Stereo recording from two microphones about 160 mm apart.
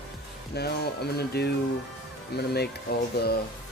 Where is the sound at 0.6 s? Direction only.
90° left.